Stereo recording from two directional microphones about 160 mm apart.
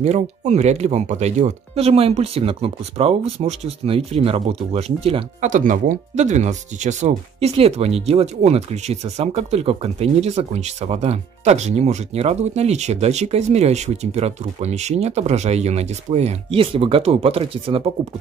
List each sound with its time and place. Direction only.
0.0 s speech: 45° right (ahead or behind)
5.5 s speech: 55° right (ahead or behind); by 17.9 s 35° right (ahead or behind)